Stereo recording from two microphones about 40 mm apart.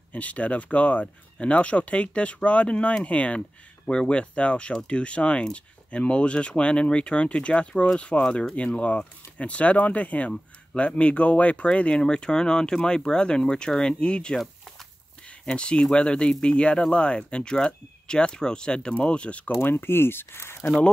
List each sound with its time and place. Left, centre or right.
0.1 s speech: left
3.3 s speech: centre; by 19.5 s left
19.5 s speech: left